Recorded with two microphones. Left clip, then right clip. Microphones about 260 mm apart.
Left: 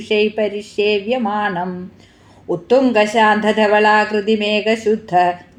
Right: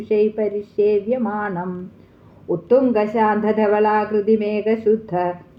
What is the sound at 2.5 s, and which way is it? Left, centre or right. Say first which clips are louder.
A woman's voice: left 2 dB; left.